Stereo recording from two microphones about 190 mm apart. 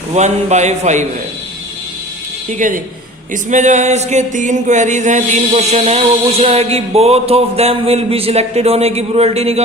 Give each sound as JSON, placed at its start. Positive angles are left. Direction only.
{"t": 0.1, "sound": "mantra", "side_deg": -35}
{"t": 2.5, "sound": "speech", "side_deg": -45}
{"t": 3.5, "sound": "mantra", "side_deg": -40}